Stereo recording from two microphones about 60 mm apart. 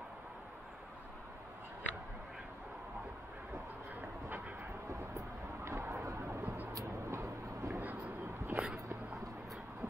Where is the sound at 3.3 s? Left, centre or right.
Right.